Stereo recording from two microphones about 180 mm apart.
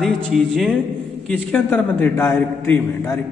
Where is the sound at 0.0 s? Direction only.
Centre (ahead or behind).